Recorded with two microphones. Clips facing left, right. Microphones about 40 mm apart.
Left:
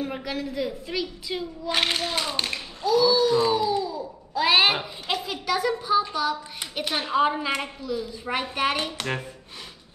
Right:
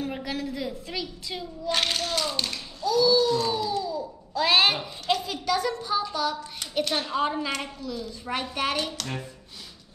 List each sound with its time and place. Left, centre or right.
0.0 s a woman's voice: centre
9.0 s speech: left